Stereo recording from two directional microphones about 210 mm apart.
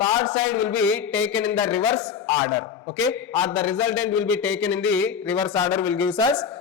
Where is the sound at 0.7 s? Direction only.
10° left (ahead or behind).